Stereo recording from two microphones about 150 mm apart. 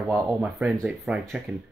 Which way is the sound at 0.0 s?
20° right (ahead or behind).